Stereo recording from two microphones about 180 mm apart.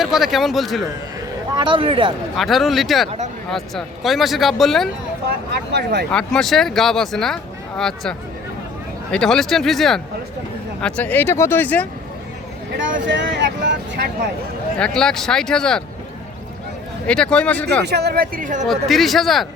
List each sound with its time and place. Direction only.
0.0 s speech: centre (ahead or behind)
1.5 s speech: 25° right (ahead or behind)
2.3 s speech: centre (ahead or behind)
5.7 s speech: 70° right (ahead or behind)
6.1 s speech: 5° left (ahead or behind)
9.1 s speech: 5° left (ahead or behind)
12.7 s speech: 90° right
14.8 s speech: 5° left (ahead or behind)
17.1 s speech: 5° left (ahead or behind)
17.8 s speech: 65° right (ahead or behind); by 18.6 s 50° right (ahead or behind)
18.6 s speech: centre (ahead or behind)